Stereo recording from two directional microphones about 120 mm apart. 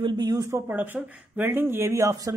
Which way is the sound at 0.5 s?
15° right (ahead or behind).